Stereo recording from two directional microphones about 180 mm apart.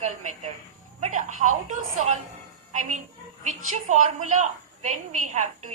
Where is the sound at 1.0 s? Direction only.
45° right (ahead or behind).